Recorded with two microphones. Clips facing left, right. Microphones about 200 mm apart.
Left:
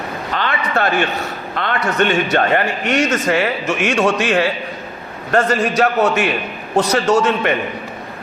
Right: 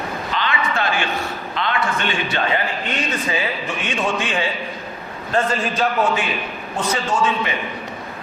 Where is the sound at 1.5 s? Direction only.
55° left (ahead or behind); by 7.5 s 75° left (ahead or behind).